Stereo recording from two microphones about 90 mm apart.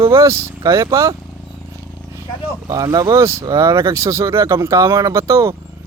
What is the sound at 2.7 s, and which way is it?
Speech, 35° right (ahead or behind).